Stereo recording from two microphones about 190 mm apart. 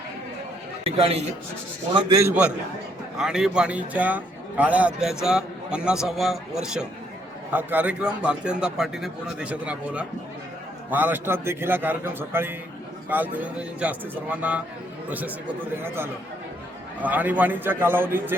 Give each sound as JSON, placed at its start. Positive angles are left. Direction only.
{"t": 0.9, "sound": "a man's voice", "side_deg": -30}
{"t": 3.2, "sound": "a man's voice", "side_deg": -5}
{"t": 17.0, "sound": "a man's voice", "side_deg": -10}